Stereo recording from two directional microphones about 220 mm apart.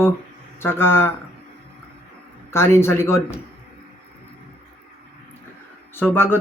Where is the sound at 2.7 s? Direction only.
10° left (ahead or behind).